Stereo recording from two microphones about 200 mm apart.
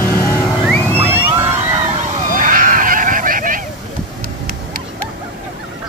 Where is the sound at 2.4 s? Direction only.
40° right (ahead or behind).